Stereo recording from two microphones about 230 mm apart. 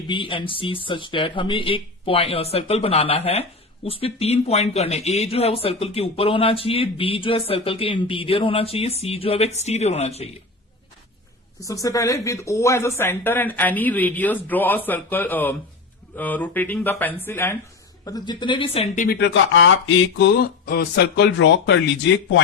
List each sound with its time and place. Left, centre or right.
0.1 s speech: left
11.6 s speech: centre
19.0 s speech: left